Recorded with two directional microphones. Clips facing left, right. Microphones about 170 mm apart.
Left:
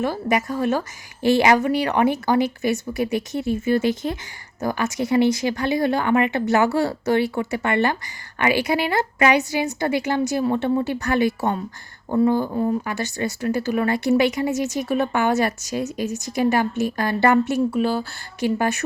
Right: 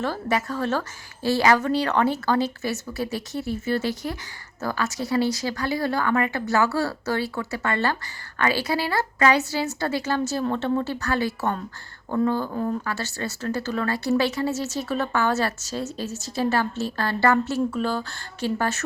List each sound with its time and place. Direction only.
0.0 s a woman's voice: 15° left (ahead or behind)